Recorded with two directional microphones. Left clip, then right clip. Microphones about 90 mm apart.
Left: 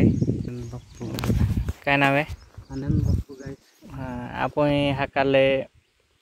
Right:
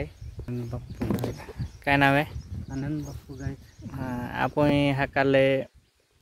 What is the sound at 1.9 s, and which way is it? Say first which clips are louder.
Speech: left 1 dB; 30° right (ahead or behind).